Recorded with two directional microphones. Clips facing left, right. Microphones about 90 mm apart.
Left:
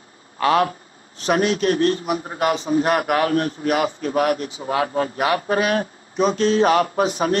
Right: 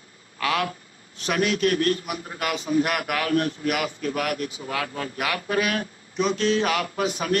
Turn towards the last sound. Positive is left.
turn(degrees=35)  # may be behind; listen again after turning